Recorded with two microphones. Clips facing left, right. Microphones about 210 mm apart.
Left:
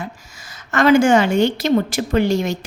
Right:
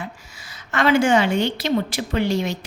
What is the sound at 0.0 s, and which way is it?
A woman's voice, 45° left (ahead or behind).